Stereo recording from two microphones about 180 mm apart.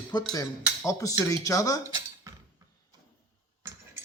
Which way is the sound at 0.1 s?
25° left (ahead or behind).